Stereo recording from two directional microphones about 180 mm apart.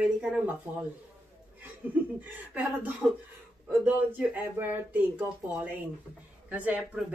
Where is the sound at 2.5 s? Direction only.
10° right (ahead or behind).